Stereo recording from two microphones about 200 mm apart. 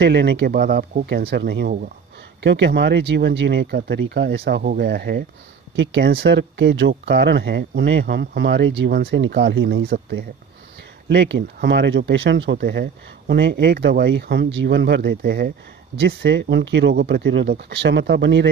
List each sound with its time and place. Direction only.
0.0 s speech: 55° right (ahead or behind)
2.4 s speech: 60° right (ahead or behind)